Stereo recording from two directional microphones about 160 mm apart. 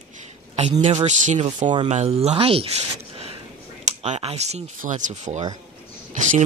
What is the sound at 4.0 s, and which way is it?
Speech, 40° right (ahead or behind).